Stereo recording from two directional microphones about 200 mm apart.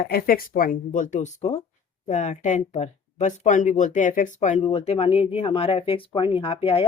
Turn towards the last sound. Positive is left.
turn(degrees=30)  # may be behind; listen again after turning